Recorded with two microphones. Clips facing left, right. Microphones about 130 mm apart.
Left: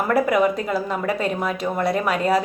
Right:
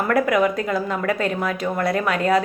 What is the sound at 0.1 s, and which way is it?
A woman's voice, 5° left (ahead or behind).